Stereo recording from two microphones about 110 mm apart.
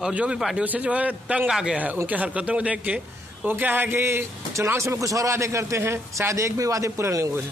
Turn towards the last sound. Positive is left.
turn(degrees=-25)  # may be behind; listen again after turning